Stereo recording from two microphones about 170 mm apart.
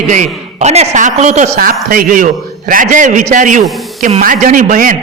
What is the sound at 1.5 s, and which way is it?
A man's voice, 60° right (ahead or behind).